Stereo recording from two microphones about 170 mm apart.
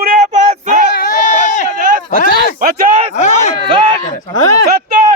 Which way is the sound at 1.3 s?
45° left (ahead or behind).